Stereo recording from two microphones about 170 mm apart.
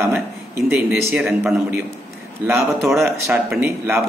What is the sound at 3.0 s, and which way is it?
Speech, 15° right (ahead or behind).